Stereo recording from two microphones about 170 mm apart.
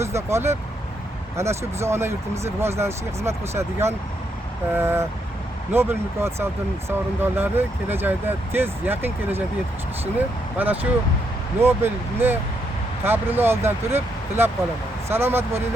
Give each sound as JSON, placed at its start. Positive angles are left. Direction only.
{"t": 0.0, "sound": "speech", "side_deg": -15}